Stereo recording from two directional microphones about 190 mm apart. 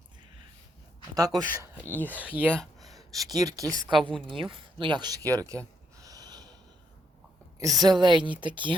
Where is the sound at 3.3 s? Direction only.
20° right (ahead or behind).